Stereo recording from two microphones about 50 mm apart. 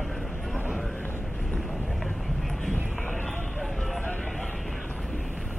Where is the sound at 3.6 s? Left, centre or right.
Centre.